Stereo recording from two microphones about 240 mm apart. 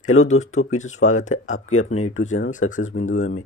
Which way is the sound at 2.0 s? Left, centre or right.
Left.